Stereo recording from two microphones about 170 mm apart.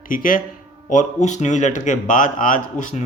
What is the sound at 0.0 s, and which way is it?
Speech, 55° left (ahead or behind).